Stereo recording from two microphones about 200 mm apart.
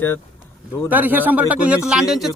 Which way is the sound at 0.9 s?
10° right (ahead or behind).